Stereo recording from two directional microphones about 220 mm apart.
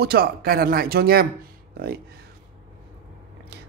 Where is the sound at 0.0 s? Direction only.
45° right (ahead or behind).